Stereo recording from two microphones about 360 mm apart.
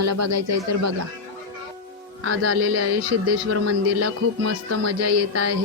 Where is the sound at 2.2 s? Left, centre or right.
Right.